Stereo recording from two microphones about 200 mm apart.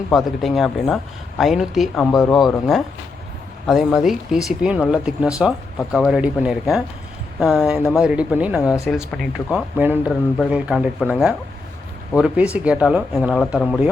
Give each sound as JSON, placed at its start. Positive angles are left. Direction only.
{"t": 0.1, "sound": "speech", "side_deg": 0}